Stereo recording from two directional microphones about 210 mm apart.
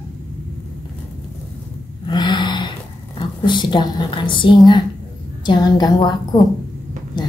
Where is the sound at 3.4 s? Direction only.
20° left (ahead or behind).